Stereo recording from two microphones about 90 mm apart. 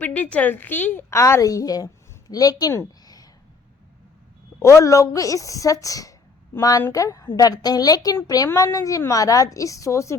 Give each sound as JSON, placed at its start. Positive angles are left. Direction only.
{"t": 0.0, "sound": "a woman's voice", "side_deg": 15}
{"t": 1.1, "sound": "a woman's voice", "side_deg": 35}
{"t": 4.6, "sound": "a woman's voice", "side_deg": 35}